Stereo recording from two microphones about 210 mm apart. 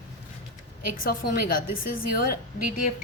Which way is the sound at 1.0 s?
40° left (ahead or behind).